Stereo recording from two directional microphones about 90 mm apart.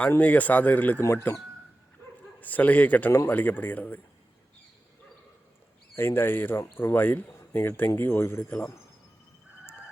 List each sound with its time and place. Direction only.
0.1 s speech: 20° left (ahead or behind)
1.0 s speech: 30° left (ahead or behind)
2.4 s speech: 20° left (ahead or behind)
6.0 s speech: 25° left (ahead or behind)